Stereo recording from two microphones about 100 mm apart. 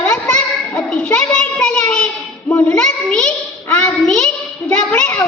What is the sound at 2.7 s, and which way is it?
Child singing, 10° left (ahead or behind).